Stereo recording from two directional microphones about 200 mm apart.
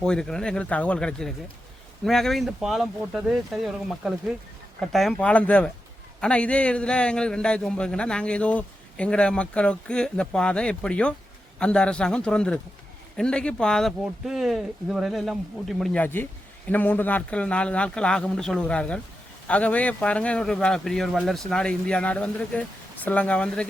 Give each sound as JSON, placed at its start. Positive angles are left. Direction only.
{"t": 0.0, "sound": "a man's voice", "side_deg": 5}